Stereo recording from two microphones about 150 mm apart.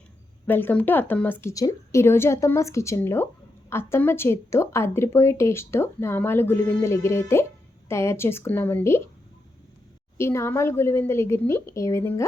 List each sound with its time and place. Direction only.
0.4 s speech: 10° left (ahead or behind)
10.2 s speech: 15° left (ahead or behind)